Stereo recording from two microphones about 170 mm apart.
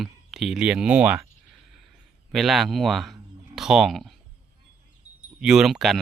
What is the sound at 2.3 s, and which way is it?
Speech, centre (ahead or behind).